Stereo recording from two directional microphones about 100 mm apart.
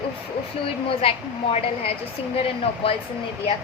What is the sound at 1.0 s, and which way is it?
Speech, 65° left (ahead or behind).